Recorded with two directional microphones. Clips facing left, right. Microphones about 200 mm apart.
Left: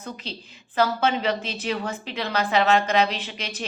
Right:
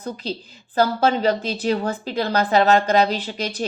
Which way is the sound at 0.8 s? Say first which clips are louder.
Right 4 dB; 40° right (ahead or behind).